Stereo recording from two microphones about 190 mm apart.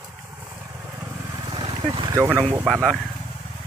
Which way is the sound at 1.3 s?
25° right (ahead or behind).